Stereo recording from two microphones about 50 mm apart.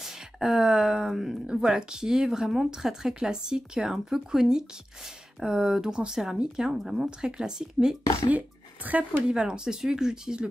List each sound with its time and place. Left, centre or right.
0.0 s speech: centre
8.3 s speech: right
9.3 s speech: centre